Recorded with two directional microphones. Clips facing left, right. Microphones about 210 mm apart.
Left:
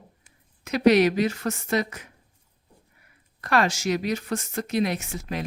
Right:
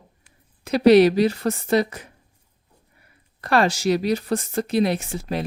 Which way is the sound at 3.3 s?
30° right (ahead or behind).